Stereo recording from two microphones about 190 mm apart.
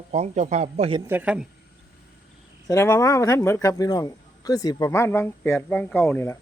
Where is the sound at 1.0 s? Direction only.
10° right (ahead or behind).